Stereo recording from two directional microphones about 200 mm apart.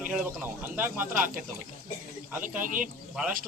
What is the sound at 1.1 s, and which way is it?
Speech, 40° right (ahead or behind).